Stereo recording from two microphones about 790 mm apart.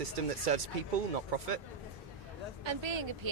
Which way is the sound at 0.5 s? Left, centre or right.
Right.